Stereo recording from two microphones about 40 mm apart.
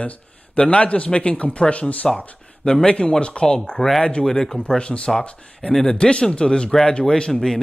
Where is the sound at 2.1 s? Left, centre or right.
Left.